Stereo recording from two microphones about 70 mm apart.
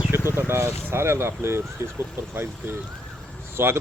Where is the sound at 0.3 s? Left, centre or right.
Right.